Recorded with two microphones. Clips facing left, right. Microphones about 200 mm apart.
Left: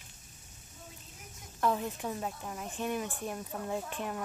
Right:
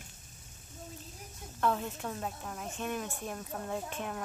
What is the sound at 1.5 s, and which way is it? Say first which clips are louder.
Speech: left 1 dB; 10° left (ahead or behind).